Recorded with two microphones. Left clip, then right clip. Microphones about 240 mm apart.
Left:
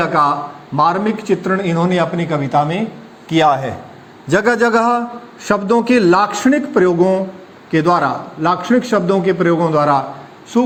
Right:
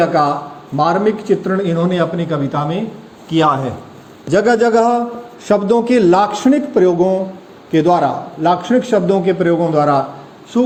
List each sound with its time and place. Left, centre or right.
0.0 s a man's voice: left